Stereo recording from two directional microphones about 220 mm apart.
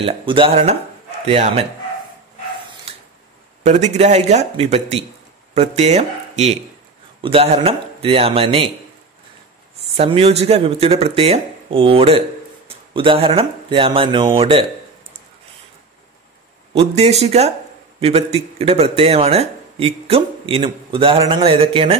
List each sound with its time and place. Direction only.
0.0 s speech: 25° right (ahead or behind)
3.6 s speech: 30° right (ahead or behind)
9.9 s speech: 25° right (ahead or behind)
16.7 s speech: 30° right (ahead or behind)